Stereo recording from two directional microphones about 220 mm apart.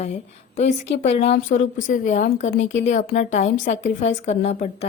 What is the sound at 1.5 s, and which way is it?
Speech, 35° left (ahead or behind).